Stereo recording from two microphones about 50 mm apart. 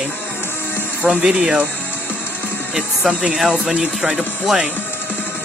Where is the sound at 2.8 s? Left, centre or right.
Centre.